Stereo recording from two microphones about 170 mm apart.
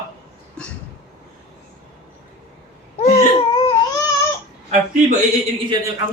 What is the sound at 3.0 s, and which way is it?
Baby cry, 40° left (ahead or behind).